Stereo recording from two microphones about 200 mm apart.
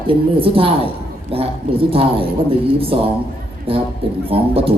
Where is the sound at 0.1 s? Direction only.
25° right (ahead or behind).